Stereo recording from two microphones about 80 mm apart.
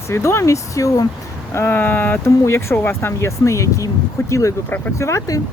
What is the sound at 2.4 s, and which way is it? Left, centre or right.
Speech, left.